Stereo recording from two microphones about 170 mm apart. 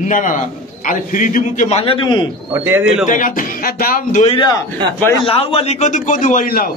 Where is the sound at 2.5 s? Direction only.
15° right (ahead or behind).